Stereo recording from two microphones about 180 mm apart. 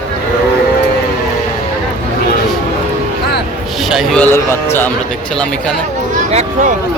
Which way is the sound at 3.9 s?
Centre (ahead or behind).